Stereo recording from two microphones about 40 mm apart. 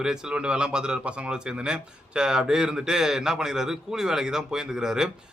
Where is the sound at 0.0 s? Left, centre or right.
Centre.